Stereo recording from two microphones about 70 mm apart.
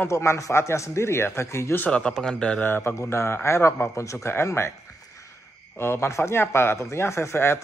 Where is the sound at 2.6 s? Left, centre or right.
Left.